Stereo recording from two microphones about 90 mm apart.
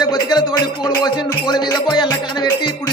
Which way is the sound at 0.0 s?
50° left (ahead or behind).